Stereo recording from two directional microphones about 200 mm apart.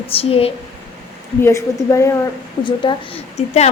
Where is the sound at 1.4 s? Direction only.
15° left (ahead or behind).